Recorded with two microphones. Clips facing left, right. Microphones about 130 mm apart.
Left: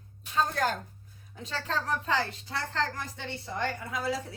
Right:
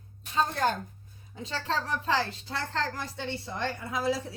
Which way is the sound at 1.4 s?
25° right (ahead or behind).